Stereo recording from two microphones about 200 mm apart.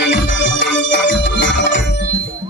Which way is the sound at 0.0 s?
60° left (ahead or behind).